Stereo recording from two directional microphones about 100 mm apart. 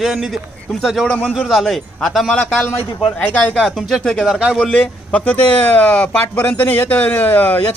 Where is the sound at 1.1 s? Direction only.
15° left (ahead or behind).